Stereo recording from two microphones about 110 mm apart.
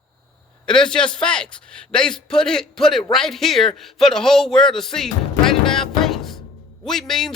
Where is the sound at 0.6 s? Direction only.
5° left (ahead or behind).